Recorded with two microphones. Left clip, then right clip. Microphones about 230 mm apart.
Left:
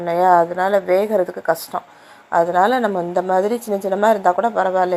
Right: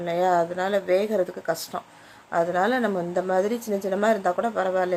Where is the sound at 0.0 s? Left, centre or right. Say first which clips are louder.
Left 8 dB; centre.